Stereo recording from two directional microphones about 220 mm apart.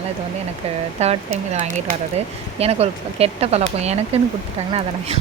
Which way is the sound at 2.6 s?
25° right (ahead or behind).